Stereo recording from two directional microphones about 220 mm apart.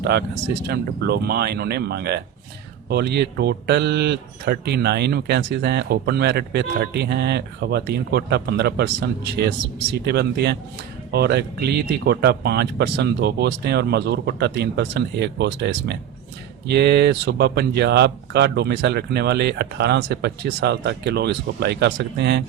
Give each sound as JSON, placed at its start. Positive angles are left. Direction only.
{"t": 0.0, "sound": "speech", "side_deg": -50}